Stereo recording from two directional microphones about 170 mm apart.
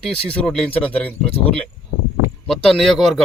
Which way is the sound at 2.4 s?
Centre (ahead or behind).